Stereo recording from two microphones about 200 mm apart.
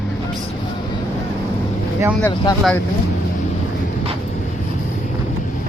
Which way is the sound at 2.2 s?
20° left (ahead or behind).